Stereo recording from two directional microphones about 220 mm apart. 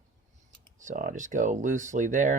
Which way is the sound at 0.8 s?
35° right (ahead or behind).